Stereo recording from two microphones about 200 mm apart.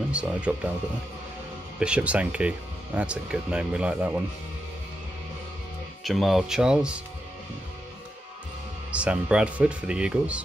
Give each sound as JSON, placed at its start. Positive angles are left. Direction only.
{"t": 0.1, "sound": "speech", "side_deg": -5}
{"t": 1.8, "sound": "speech", "side_deg": -5}
{"t": 6.0, "sound": "speech", "side_deg": 0}
{"t": 8.9, "sound": "speech", "side_deg": -5}